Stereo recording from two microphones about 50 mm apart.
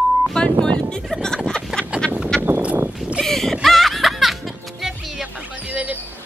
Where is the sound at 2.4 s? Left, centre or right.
Right.